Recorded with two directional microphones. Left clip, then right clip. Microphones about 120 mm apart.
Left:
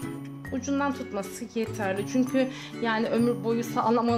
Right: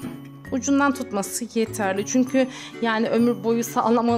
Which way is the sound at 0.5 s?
60° right (ahead or behind).